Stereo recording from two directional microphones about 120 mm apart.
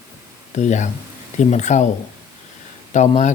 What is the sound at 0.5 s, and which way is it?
Speech, 75° left (ahead or behind).